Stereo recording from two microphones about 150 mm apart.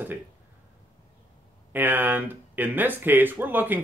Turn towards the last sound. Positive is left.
turn(degrees=-10)  # may be behind; listen again after turning